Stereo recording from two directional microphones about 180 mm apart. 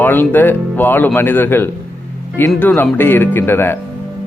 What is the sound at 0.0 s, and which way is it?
A man's voice, 10° left (ahead or behind).